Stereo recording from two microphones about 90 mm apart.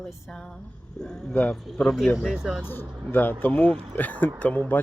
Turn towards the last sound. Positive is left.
turn(degrees=15)  # may be behind; listen again after turning